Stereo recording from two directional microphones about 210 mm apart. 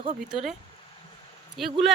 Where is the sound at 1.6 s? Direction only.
Centre (ahead or behind).